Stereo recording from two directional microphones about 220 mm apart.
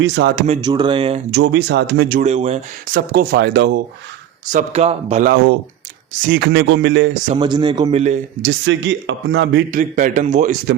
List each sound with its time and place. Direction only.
0.0 s speech: 50° right (ahead or behind)
0.4 s speech: 20° right (ahead or behind)
1.3 s speech: 50° right (ahead or behind); by 2.6 s 30° right (ahead or behind)
2.9 s speech: 45° right (ahead or behind)
4.5 s speech: 30° right (ahead or behind)
6.2 s speech: 50° right (ahead or behind)
7.3 s speech: 20° right (ahead or behind)
8.4 s speech: 55° right (ahead or behind)
9.7 s speech: 35° right (ahead or behind)